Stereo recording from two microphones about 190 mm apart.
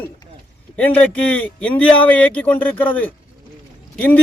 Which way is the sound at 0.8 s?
10° left (ahead or behind).